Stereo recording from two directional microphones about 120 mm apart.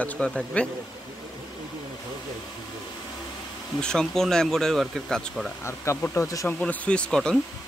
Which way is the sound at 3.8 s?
5° left (ahead or behind).